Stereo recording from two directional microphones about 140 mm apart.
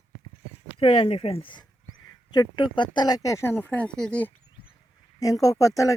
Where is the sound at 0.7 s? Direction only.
40° left (ahead or behind); by 4.3 s 10° left (ahead or behind).